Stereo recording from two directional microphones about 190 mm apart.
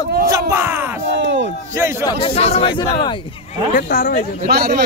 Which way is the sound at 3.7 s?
50° left (ahead or behind).